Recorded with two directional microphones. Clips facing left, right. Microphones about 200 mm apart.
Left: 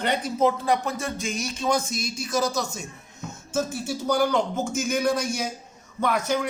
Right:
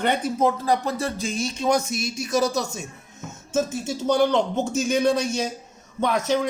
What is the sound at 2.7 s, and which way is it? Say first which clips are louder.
Music: right 2 dB; 20° right (ahead or behind).